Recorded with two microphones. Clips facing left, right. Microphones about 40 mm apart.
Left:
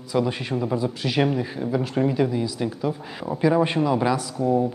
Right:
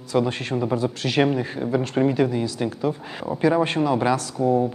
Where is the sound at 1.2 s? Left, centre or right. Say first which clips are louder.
Right 2 dB; centre.